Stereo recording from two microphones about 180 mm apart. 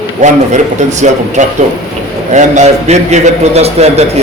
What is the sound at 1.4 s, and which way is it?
A man's voice, 40° right (ahead or behind).